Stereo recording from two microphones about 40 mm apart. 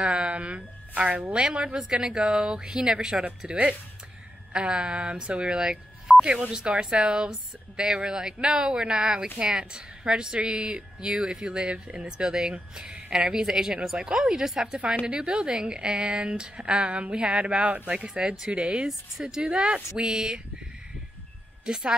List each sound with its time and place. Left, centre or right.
0.0 s a woman's voice: right
15.0 s speech: right
18.9 s speech: centre
19.4 s speech: right
21.6 s speech: right